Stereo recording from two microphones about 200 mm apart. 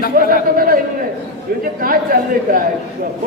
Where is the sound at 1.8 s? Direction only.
45° right (ahead or behind).